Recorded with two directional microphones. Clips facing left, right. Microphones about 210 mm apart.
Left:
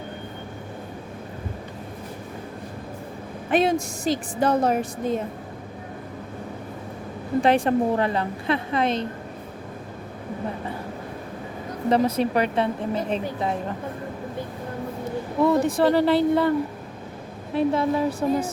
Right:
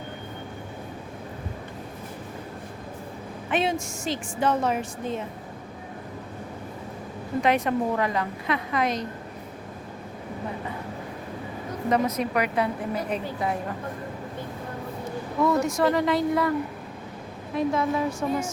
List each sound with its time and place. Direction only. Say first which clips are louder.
3.5 s a woman's voice: left 5 dB; 40° left (ahead or behind)
7.4 s a woman's voice: left 3 dB; 30° left (ahead or behind)
11.9 s a woman's voice: left 4 dB; 30° left (ahead or behind)
15.4 s a woman's voice: left 3 dB; 30° left (ahead or behind)